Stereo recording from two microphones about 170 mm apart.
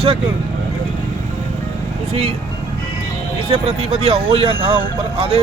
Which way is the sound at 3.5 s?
35° right (ahead or behind).